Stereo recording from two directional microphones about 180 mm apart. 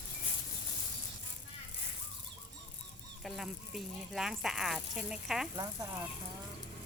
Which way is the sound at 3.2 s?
Centre (ahead or behind).